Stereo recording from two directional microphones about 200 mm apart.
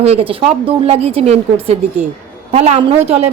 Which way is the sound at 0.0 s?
30° right (ahead or behind).